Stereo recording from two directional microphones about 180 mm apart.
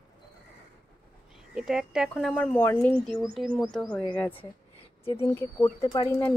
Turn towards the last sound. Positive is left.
turn(degrees=20)  # may be behind; listen again after turning